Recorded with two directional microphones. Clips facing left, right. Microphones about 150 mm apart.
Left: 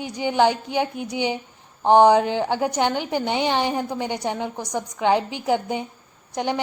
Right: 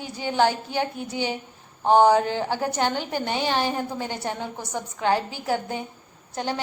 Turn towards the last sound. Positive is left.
turn(degrees=15)  # may be behind; listen again after turning